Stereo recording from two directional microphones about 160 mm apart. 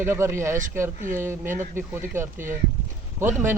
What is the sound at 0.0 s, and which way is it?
Speech, 15° right (ahead or behind).